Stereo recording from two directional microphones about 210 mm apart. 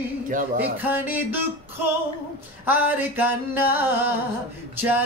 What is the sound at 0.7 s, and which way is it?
Speech, 10° right (ahead or behind).